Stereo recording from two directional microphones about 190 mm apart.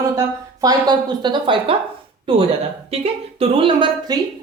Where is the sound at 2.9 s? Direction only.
30° right (ahead or behind).